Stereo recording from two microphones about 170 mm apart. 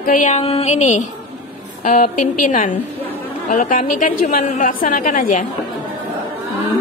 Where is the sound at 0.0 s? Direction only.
50° left (ahead or behind).